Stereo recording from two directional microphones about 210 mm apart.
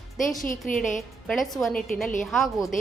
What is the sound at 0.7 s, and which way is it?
Speech, 40° left (ahead or behind).